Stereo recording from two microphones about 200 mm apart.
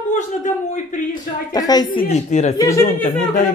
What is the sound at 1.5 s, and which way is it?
Speech, 20° left (ahead or behind).